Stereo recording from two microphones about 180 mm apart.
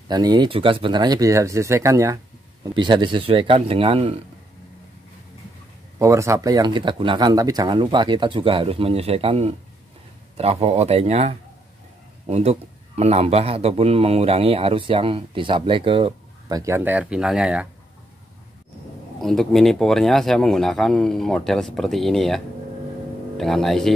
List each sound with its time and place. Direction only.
0.1 s speech: 25° right (ahead or behind)
5.9 s a man's voice: 15° right (ahead or behind)
19.2 s speech: centre (ahead or behind)